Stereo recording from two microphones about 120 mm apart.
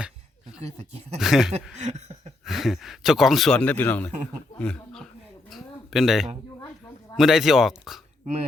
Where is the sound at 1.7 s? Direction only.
75° right (ahead or behind).